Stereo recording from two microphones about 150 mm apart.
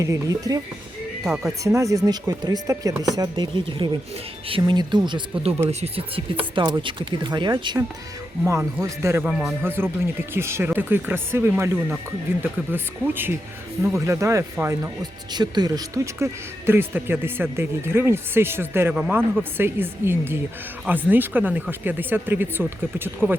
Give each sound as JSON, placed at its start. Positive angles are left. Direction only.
{"t": 0.0, "sound": "speech", "side_deg": -20}
{"t": 1.2, "sound": "speech", "side_deg": -5}
{"t": 1.6, "sound": "speech", "side_deg": -20}
{"t": 8.4, "sound": "speech", "side_deg": -20}
{"t": 9.2, "sound": "speech", "side_deg": 0}
{"t": 9.6, "sound": "speech", "side_deg": -15}
{"t": 15.3, "sound": "speech", "side_deg": -30}